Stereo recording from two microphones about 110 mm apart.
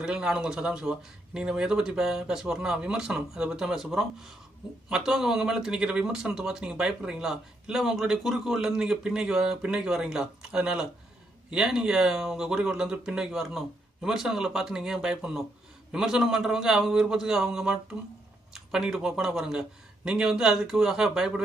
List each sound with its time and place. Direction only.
0.0 s speech: 5° right (ahead or behind)